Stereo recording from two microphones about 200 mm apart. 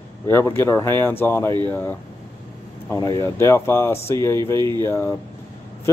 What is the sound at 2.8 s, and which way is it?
Speech, 20° left (ahead or behind).